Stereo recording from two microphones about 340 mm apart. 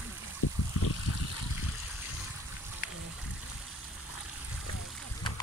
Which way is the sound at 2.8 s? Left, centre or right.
Left.